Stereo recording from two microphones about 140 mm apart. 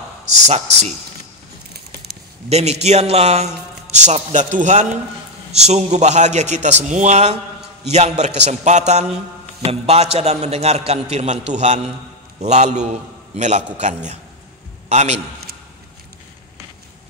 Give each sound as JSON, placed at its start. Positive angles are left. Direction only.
{"t": 0.5, "sound": "a man's voice", "side_deg": -50}
{"t": 2.5, "sound": "a man's voice", "side_deg": -50}